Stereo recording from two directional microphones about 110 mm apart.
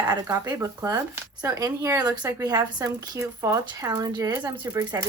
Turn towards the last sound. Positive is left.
turn(degrees=-35)  # may be behind; listen again after turning